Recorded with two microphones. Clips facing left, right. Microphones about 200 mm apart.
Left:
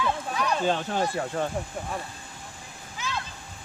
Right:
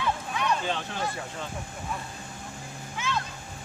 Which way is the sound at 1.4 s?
60° left (ahead or behind).